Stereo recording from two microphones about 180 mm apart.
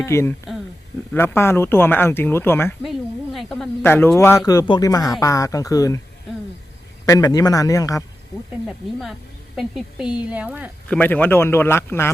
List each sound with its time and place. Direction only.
0.0 s speech: 15° left (ahead or behind)
3.3 s a woman's voice: centre (ahead or behind)
3.9 s speech: 15° left (ahead or behind)
7.0 s speech: 20° left (ahead or behind)
8.6 s a woman's voice: centre (ahead or behind)
10.8 s speech: 10° left (ahead or behind)